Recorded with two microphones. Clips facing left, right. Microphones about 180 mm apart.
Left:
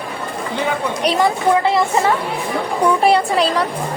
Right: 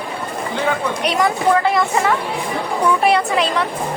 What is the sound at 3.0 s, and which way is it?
Speech, 30° left (ahead or behind).